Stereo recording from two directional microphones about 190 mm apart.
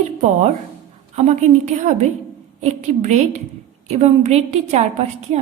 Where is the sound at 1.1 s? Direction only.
35° right (ahead or behind).